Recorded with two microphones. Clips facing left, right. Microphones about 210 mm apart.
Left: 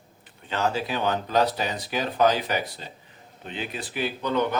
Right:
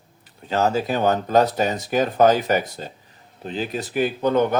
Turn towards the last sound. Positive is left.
turn(degrees=-45)  # may be behind; listen again after turning